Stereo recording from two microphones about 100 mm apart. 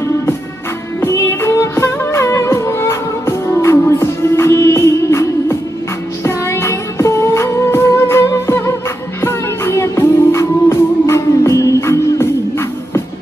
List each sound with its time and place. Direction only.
1.0 s music: 30° left (ahead or behind)